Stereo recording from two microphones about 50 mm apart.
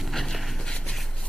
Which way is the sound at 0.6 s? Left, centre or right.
Centre.